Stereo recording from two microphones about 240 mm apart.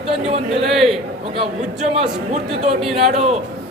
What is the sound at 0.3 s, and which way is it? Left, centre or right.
Speech, right.